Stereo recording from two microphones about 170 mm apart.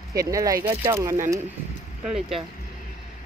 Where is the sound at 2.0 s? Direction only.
Centre (ahead or behind).